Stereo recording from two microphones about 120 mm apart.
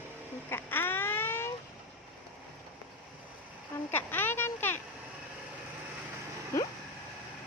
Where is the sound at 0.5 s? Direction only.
15° left (ahead or behind).